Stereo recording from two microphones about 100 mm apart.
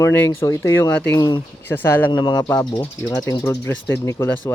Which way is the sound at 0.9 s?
20° left (ahead or behind).